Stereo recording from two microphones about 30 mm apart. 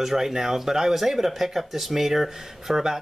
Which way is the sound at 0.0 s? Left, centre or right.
Centre.